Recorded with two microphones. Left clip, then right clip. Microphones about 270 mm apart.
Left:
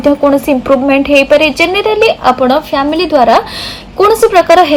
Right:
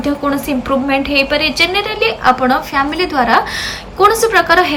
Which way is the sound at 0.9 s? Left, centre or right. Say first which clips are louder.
Left 7 dB; centre.